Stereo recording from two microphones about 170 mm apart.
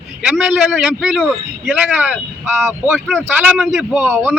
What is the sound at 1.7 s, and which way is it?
Speech, 10° right (ahead or behind).